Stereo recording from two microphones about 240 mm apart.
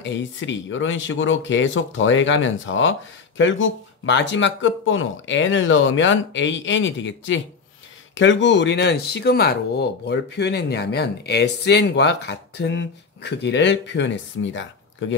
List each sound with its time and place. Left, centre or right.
0.0 s speech: left